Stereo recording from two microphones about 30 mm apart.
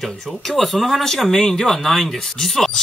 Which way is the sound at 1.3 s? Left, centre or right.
Centre.